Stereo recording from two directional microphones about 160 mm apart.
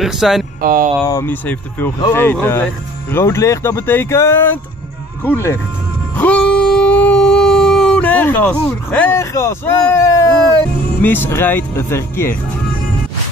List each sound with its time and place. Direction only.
0.0 s speech: centre (ahead or behind)
0.6 s speech: 65° right (ahead or behind)
1.0 s speech: 15° left (ahead or behind)
6.1 s music: 10° left (ahead or behind)
9.8 s speech: 15° left (ahead or behind)